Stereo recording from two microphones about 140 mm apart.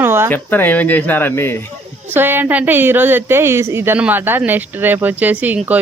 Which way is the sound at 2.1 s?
15° right (ahead or behind).